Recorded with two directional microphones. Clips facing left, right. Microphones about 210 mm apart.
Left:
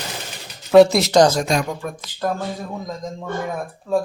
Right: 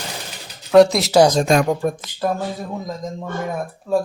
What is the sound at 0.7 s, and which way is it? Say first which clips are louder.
Speech: even; centre (ahead or behind).